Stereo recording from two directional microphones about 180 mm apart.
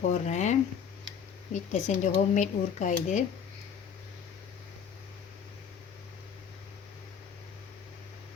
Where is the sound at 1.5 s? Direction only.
40° left (ahead or behind).